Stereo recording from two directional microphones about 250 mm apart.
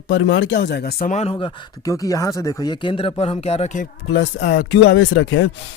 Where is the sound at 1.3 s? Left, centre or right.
Centre.